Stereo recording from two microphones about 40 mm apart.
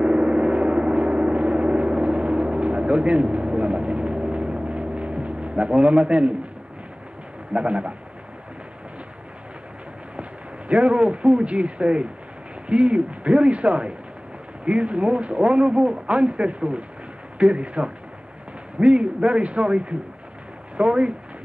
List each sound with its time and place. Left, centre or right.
0.0 s gong: right
7.5 s a man's voice: right
10.7 s a man's voice: right
18.9 s a man's voice: right